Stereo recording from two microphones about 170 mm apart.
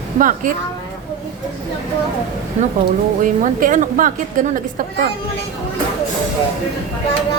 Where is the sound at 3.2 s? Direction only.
50° right (ahead or behind).